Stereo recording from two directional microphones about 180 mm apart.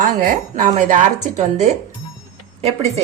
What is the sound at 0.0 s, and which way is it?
A woman's voice, 45° right (ahead or behind).